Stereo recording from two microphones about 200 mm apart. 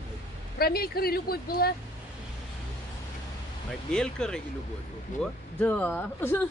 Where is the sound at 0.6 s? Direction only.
50° left (ahead or behind).